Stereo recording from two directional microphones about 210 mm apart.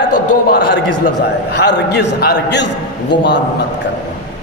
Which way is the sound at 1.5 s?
50° left (ahead or behind).